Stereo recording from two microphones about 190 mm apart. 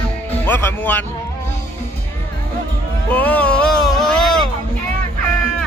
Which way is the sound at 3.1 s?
10° left (ahead or behind).